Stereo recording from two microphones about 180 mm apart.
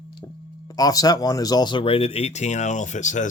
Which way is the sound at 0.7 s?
20° left (ahead or behind).